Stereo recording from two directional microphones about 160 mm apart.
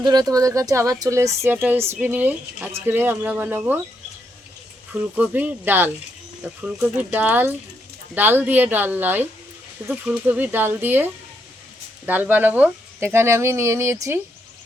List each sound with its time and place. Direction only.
0.0 s speech: 25° right (ahead or behind)
5.1 s speech: 10° right (ahead or behind)